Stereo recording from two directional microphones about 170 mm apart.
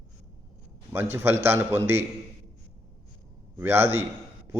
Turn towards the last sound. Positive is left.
turn(degrees=-15)  # may be behind; listen again after turning